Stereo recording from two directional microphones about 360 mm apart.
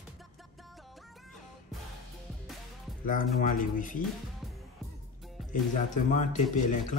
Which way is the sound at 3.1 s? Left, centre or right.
Left.